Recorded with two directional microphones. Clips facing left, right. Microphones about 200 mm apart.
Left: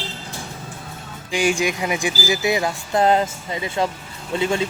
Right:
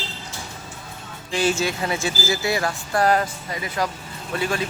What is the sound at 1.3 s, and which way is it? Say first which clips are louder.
Speech: left 2 dB; 15° left (ahead or behind).